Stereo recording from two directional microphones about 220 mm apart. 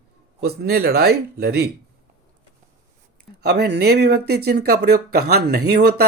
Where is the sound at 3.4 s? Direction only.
45° right (ahead or behind).